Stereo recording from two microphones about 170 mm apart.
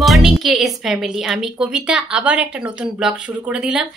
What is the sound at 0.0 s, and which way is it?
Speech, centre (ahead or behind).